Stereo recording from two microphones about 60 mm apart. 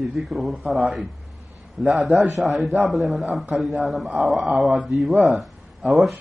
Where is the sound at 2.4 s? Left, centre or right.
Centre.